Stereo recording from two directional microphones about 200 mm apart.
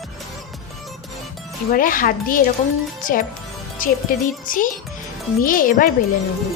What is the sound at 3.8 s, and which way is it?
A woman's voice, 45° left (ahead or behind).